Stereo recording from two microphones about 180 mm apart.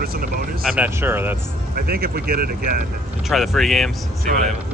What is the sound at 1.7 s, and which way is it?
Speech, 60° right (ahead or behind).